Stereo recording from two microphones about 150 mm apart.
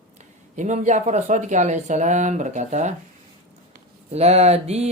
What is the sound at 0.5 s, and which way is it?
Speech, 55° right (ahead or behind).